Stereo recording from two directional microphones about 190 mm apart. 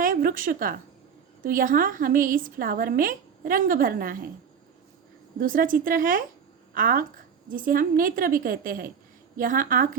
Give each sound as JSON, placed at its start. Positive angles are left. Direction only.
{"t": 0.0, "sound": "a woman's voice", "side_deg": -45}
{"t": 5.4, "sound": "a woman's voice", "side_deg": -45}